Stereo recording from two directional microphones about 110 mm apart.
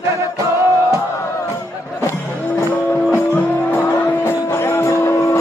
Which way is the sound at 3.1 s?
10° left (ahead or behind).